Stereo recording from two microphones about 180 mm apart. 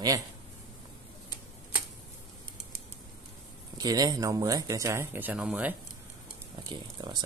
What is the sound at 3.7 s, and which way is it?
Speech, 20° right (ahead or behind).